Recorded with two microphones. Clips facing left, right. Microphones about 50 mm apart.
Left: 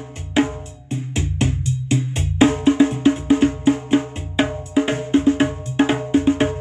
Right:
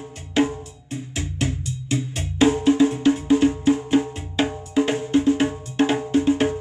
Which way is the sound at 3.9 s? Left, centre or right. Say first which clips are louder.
Left 2 dB; left.